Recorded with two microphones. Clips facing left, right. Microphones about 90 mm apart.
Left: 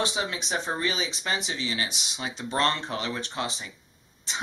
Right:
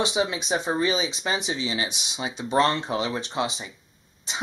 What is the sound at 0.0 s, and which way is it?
Speech, 15° right (ahead or behind).